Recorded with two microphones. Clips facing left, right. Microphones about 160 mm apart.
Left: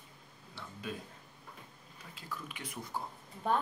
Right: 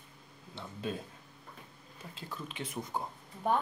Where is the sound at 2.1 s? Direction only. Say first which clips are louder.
Right 3 dB; 25° right (ahead or behind).